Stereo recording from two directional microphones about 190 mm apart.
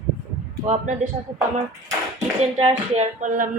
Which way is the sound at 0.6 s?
35° right (ahead or behind).